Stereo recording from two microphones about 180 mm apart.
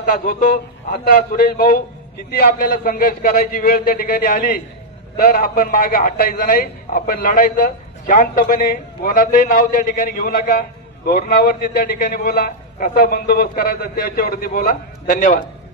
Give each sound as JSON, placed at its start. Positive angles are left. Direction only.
{"t": 0.0, "sound": "a man's voice", "side_deg": 50}